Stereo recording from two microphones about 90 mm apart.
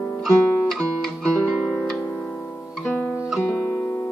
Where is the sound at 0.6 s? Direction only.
Centre (ahead or behind).